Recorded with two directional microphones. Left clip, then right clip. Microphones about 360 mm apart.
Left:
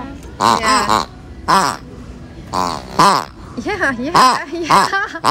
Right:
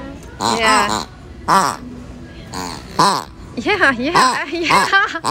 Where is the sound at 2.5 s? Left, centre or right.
Left.